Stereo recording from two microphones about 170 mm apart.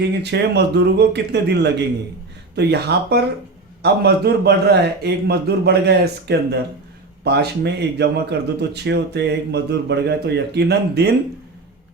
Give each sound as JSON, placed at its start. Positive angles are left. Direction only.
{"t": 0.1, "sound": "speech", "side_deg": -80}